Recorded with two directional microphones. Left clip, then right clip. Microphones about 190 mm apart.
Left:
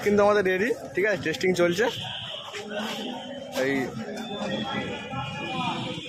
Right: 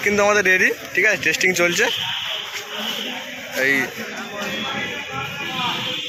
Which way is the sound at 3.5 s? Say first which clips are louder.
Right 8 dB; 5° left (ahead or behind).